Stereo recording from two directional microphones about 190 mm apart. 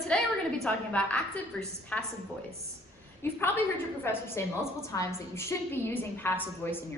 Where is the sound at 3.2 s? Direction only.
15° left (ahead or behind).